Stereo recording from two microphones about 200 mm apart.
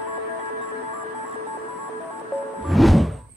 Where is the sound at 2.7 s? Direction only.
Centre (ahead or behind).